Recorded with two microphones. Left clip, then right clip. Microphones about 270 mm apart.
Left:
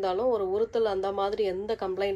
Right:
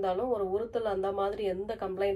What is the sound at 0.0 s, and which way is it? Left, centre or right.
A woman's voice, left.